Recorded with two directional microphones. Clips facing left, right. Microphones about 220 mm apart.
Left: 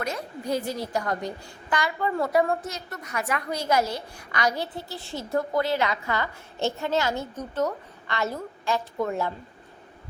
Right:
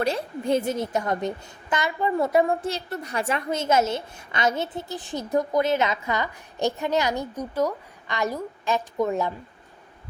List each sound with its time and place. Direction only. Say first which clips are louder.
0.0 s a woman's voice: right 6 dB; 30° right (ahead or behind)